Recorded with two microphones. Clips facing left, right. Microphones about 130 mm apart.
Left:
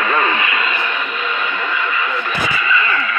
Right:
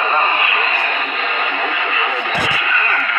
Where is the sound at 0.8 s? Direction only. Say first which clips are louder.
Right 1 dB; 60° right (ahead or behind).